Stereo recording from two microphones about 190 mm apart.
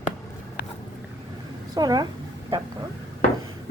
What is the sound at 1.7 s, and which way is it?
Speech, 20° right (ahead or behind).